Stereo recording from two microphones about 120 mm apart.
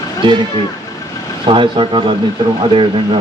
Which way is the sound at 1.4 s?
40° right (ahead or behind).